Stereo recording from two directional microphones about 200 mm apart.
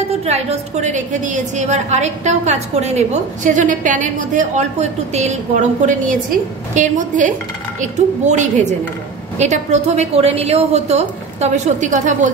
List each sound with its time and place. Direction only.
0.2 s a woman's voice: 30° right (ahead or behind)